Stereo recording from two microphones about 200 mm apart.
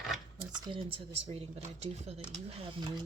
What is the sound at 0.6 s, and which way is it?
Speech, 25° right (ahead or behind).